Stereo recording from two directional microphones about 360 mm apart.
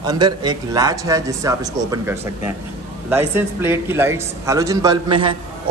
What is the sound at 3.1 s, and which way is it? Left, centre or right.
A man's voice, centre.